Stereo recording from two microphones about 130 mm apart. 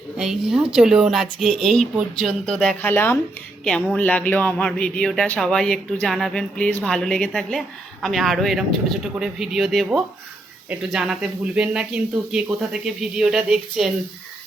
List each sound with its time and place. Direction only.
0.2 s speech: 5° right (ahead or behind)
2.8 s speech: 15° left (ahead or behind); by 13.9 s 5° right (ahead or behind)